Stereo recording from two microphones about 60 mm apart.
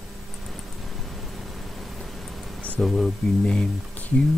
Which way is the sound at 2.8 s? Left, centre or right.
Centre.